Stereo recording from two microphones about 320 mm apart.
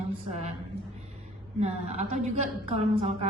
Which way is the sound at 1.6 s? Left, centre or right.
Right.